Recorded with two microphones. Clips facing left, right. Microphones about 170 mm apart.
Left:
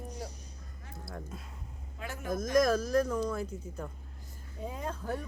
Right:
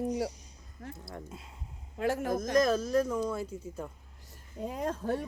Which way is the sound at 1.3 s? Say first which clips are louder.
Left 1 dB; 20° right (ahead or behind).